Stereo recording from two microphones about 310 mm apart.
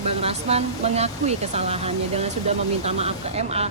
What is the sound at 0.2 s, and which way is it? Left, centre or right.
Speech, centre.